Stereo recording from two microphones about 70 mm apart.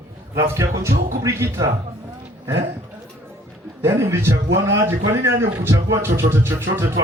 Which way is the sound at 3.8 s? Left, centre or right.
Right.